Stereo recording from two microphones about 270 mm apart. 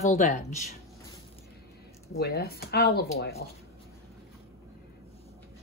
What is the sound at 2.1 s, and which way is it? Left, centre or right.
A woman's voice, left.